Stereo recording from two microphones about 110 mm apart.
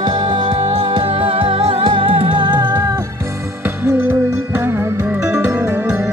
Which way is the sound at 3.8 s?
15° right (ahead or behind).